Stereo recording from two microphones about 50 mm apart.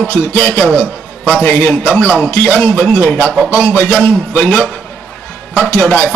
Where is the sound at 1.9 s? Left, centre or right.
Left.